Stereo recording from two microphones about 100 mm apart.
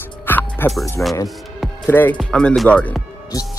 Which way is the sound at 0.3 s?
20° left (ahead or behind).